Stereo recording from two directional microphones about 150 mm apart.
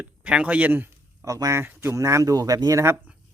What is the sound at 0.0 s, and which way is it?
A man's voice, 5° right (ahead or behind).